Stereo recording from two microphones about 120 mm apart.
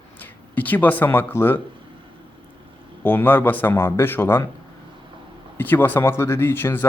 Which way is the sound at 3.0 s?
15° left (ahead or behind).